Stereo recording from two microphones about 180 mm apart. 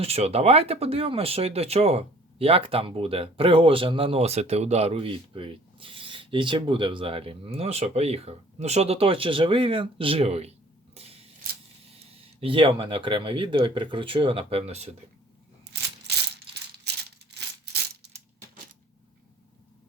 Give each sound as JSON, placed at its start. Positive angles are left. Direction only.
{"t": 0.0, "sound": "speech", "side_deg": -35}
{"t": 10.9, "sound": "scissors", "side_deg": -35}
{"t": 12.2, "sound": "speech", "side_deg": -30}